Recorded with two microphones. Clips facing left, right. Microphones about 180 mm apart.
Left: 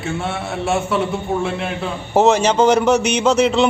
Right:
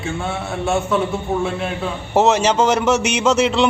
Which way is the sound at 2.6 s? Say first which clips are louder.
Left 3 dB; 35° left (ahead or behind).